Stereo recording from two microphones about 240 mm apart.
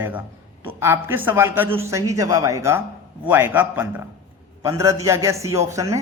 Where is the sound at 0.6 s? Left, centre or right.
Centre.